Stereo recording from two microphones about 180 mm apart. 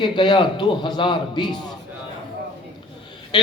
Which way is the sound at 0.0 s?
25° left (ahead or behind).